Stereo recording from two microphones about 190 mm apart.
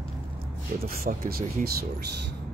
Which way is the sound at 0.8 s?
50° right (ahead or behind).